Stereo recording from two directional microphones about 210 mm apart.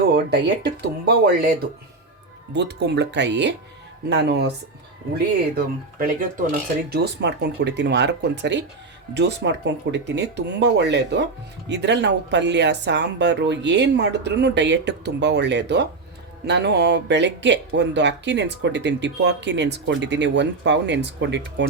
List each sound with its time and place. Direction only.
0.1 s speech: 55° right (ahead or behind)